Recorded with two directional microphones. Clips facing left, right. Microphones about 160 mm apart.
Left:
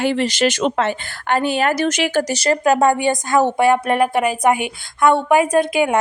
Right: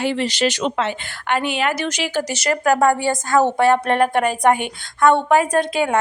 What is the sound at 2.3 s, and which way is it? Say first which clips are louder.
A woman's voice: even; 30° left (ahead or behind).